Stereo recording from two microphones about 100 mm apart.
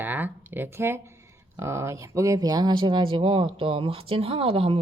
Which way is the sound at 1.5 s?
25° right (ahead or behind).